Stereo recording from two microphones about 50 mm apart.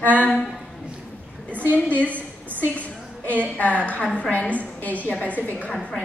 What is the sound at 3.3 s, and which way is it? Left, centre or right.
A woman's voice, left.